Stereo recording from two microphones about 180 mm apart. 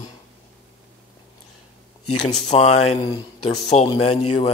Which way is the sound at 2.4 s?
40° left (ahead or behind).